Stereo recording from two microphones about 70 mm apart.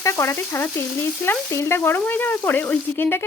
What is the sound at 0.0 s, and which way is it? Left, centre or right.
Speech, left.